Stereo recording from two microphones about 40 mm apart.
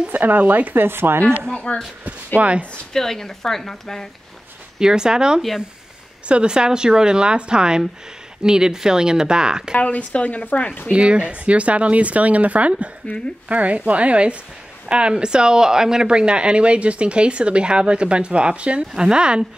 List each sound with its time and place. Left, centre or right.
0.1 s speech: right
0.7 s speech: right
1.5 s a sound: left
2.4 s speech: right
2.9 s speech: centre
4.7 s speech: centre
9.8 s speech: left
10.9 s speech: right